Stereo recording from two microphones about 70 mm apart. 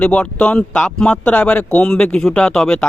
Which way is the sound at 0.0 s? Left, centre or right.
Centre.